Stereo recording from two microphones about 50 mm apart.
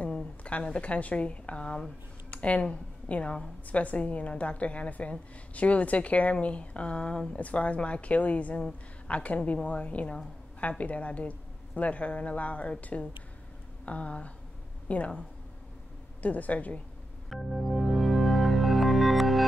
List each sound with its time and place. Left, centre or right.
0.0 s a woman's voice: left
16.2 s a woman's voice: left
17.3 s music: centre